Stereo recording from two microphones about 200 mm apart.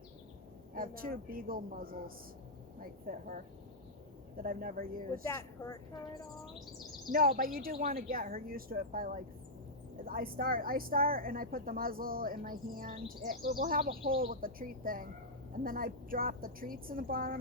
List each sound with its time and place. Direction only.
0.7 s speech: 45° right (ahead or behind)
4.4 s speech: 45° right (ahead or behind)
5.2 s speech: 15° left (ahead or behind)
7.1 s speech: 45° right (ahead or behind)